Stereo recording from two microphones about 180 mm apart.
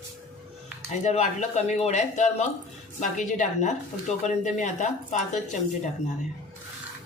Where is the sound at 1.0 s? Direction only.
40° left (ahead or behind).